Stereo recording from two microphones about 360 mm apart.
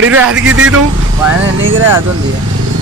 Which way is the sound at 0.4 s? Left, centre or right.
Right.